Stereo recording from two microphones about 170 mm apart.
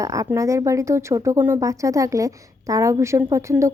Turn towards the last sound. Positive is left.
turn(degrees=-15)  # may be behind; listen again after turning